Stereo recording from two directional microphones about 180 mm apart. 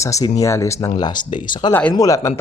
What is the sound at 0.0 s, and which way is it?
Speech, 15° left (ahead or behind).